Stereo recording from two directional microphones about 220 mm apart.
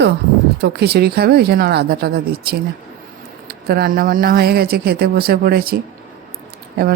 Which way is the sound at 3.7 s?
45° right (ahead or behind).